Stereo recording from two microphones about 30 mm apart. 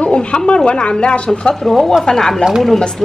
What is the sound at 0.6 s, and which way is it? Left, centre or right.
Speech, left.